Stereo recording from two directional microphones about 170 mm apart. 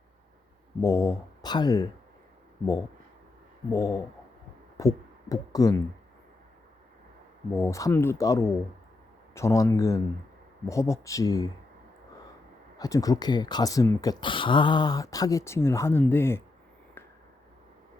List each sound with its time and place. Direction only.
0.8 s speech: 20° left (ahead or behind)
3.7 s speech: 20° left (ahead or behind)
7.5 s speech: 15° left (ahead or behind)
12.8 s speech: 20° left (ahead or behind)